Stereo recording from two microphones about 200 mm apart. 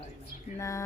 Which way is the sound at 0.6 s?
15° left (ahead or behind).